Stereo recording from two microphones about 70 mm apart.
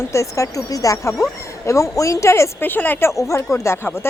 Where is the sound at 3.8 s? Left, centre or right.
Left.